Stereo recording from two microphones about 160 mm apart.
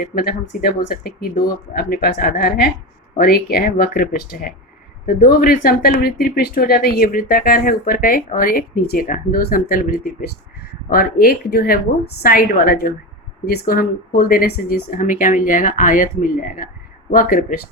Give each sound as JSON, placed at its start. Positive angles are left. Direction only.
{"t": 0.0, "sound": "speech", "side_deg": 65}
{"t": 13.4, "sound": "speech", "side_deg": 85}